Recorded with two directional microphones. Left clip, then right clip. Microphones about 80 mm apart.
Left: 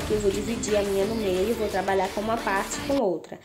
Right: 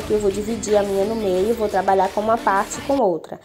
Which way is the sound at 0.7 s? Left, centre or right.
Centre.